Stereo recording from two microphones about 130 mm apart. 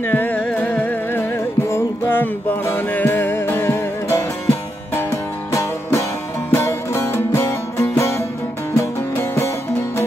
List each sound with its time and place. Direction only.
0.0 s music: 15° left (ahead or behind)